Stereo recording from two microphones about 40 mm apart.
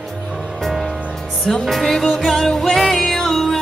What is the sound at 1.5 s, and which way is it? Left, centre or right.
Music, centre.